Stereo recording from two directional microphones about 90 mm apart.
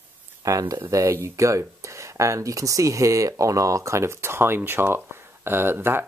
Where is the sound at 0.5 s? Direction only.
40° right (ahead or behind).